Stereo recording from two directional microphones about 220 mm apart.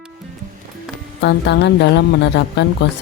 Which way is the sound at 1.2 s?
50° left (ahead or behind).